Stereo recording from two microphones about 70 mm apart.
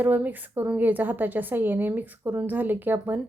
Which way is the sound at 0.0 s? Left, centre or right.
Right.